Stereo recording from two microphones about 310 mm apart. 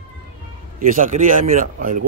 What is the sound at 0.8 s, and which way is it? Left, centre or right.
A man's voice, right.